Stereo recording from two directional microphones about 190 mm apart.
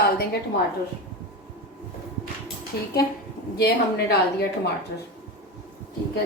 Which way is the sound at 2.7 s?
55° left (ahead or behind).